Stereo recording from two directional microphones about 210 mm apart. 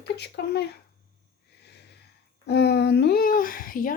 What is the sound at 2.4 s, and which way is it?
Speech, 50° left (ahead or behind).